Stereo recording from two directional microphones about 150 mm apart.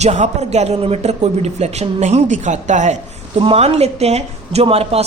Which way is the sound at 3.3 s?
40° right (ahead or behind).